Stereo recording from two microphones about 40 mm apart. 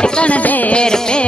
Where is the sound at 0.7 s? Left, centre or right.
Left.